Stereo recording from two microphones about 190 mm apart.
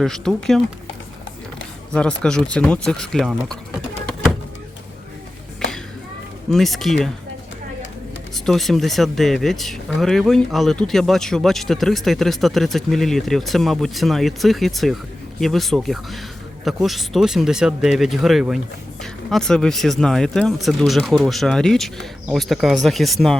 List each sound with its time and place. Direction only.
0.0 s speech: centre (ahead or behind)
1.9 s speech: 5° left (ahead or behind)
6.5 s speech: centre (ahead or behind)
8.4 s speech: centre (ahead or behind)